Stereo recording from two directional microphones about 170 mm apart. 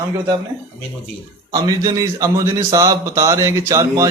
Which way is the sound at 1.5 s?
20° right (ahead or behind).